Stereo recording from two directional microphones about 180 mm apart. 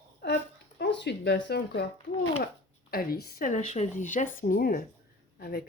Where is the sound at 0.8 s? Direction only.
70° left (ahead or behind).